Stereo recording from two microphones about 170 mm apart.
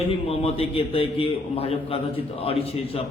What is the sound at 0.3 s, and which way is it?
A man's voice, 35° left (ahead or behind).